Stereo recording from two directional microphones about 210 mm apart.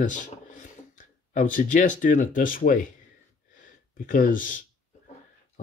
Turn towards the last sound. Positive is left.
turn(degrees=40)  # may be behind; listen again after turning